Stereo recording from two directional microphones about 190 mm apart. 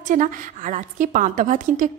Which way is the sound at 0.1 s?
45° right (ahead or behind).